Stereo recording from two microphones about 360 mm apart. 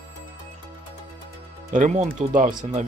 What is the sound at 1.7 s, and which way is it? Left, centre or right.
Speech, centre.